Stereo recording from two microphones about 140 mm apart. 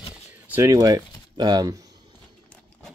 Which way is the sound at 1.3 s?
30° right (ahead or behind).